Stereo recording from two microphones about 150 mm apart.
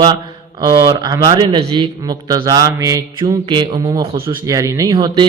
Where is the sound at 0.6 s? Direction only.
25° right (ahead or behind).